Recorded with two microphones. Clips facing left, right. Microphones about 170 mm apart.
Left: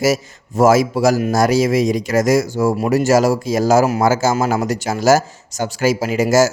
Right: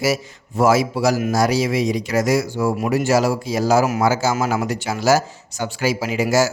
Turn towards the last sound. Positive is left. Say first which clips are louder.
# left 4 dB
turn(degrees=45)  # may be behind; listen again after turning